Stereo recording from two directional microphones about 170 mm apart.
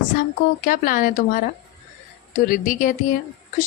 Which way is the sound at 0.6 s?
55° left (ahead or behind).